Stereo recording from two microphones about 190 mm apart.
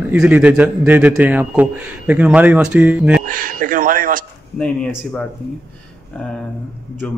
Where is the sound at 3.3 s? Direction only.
45° right (ahead or behind).